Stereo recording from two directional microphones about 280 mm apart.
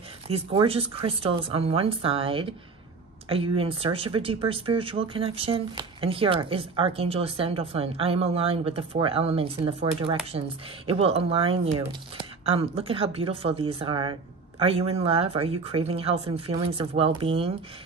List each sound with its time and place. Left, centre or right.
0.3 s speech: right